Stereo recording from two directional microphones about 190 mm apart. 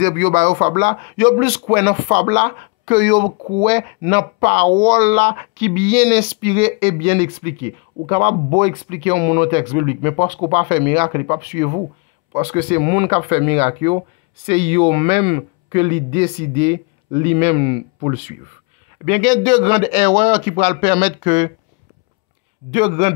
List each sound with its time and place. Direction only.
0.0 s speech: 40° right (ahead or behind)
1.1 s speech: 15° right (ahead or behind)
22.7 s speech: 30° right (ahead or behind)